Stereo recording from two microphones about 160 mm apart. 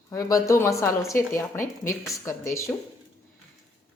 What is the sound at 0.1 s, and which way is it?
Speech, 20° left (ahead or behind).